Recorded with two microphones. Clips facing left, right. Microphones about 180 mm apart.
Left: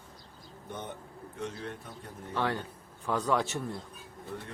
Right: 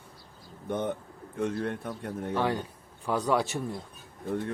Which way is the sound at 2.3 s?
10° right (ahead or behind).